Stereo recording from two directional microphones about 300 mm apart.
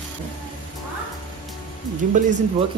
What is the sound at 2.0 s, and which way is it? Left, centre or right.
Speech, right.